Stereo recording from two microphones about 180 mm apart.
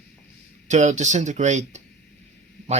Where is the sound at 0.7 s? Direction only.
40° right (ahead or behind).